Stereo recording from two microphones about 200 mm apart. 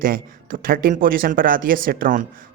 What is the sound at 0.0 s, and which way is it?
Speech, 45° right (ahead or behind).